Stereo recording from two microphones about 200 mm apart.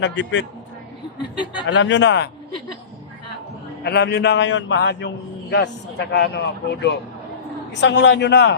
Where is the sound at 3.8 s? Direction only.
55° left (ahead or behind).